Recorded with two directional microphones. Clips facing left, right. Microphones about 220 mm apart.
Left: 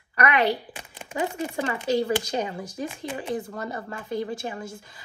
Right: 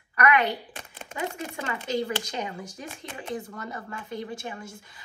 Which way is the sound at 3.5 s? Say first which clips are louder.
Left 4 dB; 35° left (ahead or behind).